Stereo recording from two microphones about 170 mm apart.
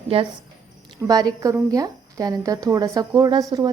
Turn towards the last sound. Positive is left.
turn(degrees=-20)  # may be behind; listen again after turning